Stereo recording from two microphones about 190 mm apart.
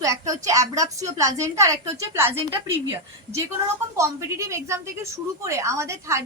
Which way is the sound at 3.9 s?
15° right (ahead or behind).